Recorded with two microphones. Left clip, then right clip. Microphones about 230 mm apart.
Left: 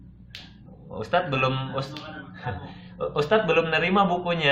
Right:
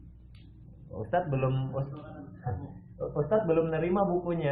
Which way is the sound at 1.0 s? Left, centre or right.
Centre.